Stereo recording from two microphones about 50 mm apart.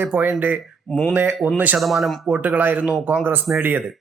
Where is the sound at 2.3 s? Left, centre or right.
Right.